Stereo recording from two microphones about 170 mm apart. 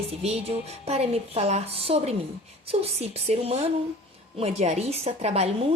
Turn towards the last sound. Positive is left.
turn(degrees=-40)  # may be behind; listen again after turning